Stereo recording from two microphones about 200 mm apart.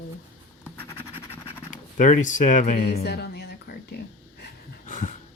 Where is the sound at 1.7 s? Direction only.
40° left (ahead or behind).